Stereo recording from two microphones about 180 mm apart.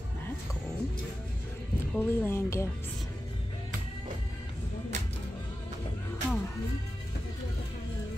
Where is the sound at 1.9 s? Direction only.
10° left (ahead or behind).